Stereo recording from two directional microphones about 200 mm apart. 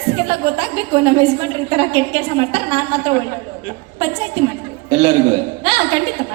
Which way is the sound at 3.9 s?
25° right (ahead or behind).